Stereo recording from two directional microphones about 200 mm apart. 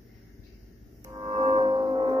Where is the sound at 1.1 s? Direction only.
25° right (ahead or behind).